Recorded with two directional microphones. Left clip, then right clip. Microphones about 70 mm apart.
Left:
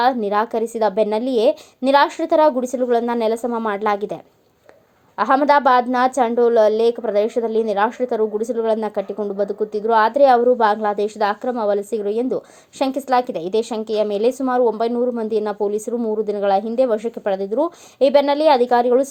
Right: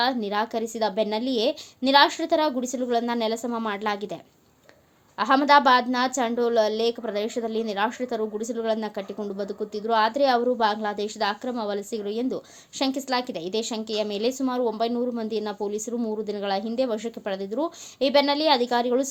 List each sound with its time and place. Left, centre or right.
0.0 s a woman's voice: left
3.8 s a woman's voice: left
5.1 s a woman's voice: left
15.3 s a woman's voice: left
16.2 s a woman's voice: left